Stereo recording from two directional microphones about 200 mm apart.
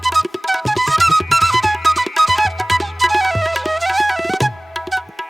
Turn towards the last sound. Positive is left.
turn(degrees=0)  # may be behind; listen again after turning